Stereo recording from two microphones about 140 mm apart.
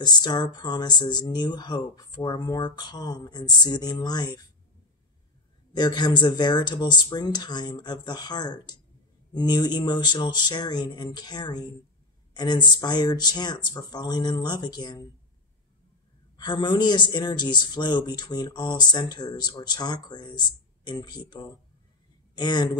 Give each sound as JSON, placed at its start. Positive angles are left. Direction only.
{"t": 0.0, "sound": "speech", "side_deg": 30}
{"t": 5.7, "sound": "a man's voice", "side_deg": 30}
{"t": 16.3, "sound": "a man's voice", "side_deg": 35}
{"t": 22.3, "sound": "speech", "side_deg": 30}